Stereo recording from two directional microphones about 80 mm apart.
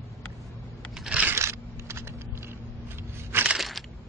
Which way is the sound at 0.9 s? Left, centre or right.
Centre.